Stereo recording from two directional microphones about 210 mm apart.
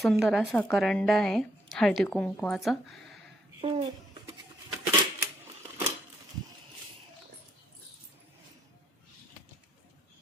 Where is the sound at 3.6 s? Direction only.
20° right (ahead or behind).